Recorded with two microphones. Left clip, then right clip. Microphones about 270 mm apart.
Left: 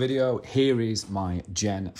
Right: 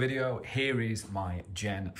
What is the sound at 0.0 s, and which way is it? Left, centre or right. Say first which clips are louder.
Speech: left 7 dB; centre.